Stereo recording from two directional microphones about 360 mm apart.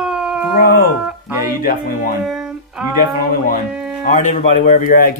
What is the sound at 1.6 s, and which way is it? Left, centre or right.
Speech, left.